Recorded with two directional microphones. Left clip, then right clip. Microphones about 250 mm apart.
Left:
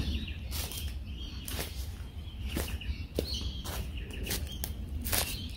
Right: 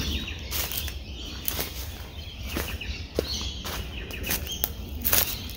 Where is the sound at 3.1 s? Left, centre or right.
Left.